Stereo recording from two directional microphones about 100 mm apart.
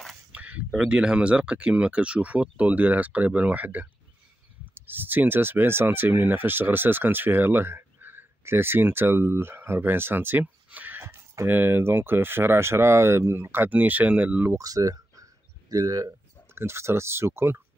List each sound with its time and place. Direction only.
0.3 s speech: 15° right (ahead or behind)
14.6 s speech: 35° right (ahead or behind)